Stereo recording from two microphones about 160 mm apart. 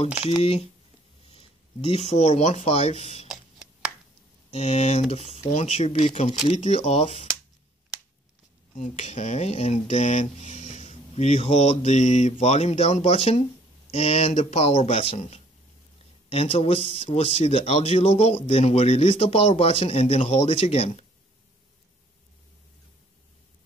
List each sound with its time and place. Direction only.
0.4 s speech: 40° left (ahead or behind)
4.5 s speech: 40° left (ahead or behind)
8.7 s speech: 50° left (ahead or behind)